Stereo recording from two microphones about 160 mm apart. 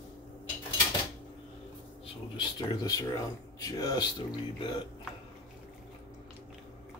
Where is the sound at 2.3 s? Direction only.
25° left (ahead or behind).